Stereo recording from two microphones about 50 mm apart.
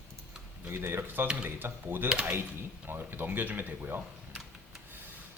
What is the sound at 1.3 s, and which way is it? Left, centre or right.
Speech, right.